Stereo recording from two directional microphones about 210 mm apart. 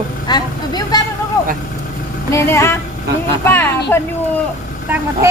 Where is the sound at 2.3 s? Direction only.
10° left (ahead or behind).